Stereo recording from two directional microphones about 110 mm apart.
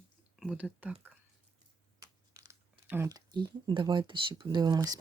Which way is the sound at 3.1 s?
35° right (ahead or behind).